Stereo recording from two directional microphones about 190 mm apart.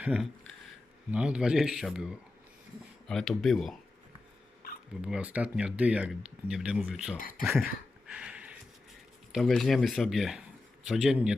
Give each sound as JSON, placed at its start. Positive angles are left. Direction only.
{"t": 0.0, "sound": "speech", "side_deg": -5}
{"t": 5.0, "sound": "speech", "side_deg": -5}
{"t": 7.2, "sound": "speech", "side_deg": 45}
{"t": 8.0, "sound": "a sound", "side_deg": -5}
{"t": 9.3, "sound": "speech", "side_deg": 0}